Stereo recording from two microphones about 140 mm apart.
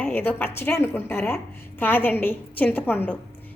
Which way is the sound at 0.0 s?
15° left (ahead or behind).